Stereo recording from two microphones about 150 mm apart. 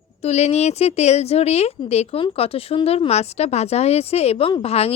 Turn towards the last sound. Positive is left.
turn(degrees=45)  # may be behind; listen again after turning